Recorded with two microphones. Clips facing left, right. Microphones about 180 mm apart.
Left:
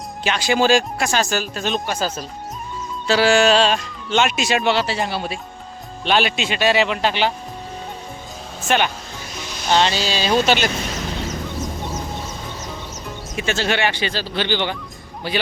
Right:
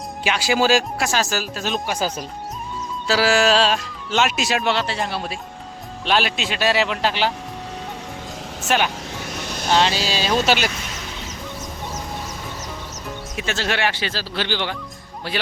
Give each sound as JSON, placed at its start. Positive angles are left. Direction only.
{"t": 0.3, "sound": "speech", "side_deg": -5}
{"t": 2.0, "sound": "speech", "side_deg": -15}
{"t": 3.1, "sound": "speech", "side_deg": 0}
{"t": 8.6, "sound": "speech", "side_deg": -5}
{"t": 9.1, "sound": "music", "side_deg": -65}
{"t": 9.6, "sound": "speech", "side_deg": 0}
{"t": 13.3, "sound": "speech", "side_deg": 0}